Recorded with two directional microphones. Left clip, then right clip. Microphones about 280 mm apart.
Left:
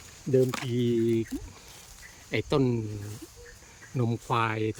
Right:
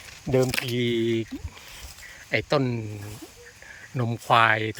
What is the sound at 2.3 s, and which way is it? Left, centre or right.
Speech, centre.